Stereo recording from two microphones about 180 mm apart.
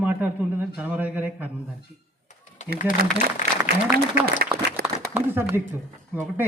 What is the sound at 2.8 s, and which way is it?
Speech, 45° left (ahead or behind).